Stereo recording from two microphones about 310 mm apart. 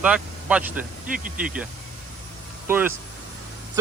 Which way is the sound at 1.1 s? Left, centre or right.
Right.